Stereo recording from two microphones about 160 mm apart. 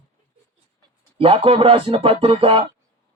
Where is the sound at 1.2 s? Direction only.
35° right (ahead or behind).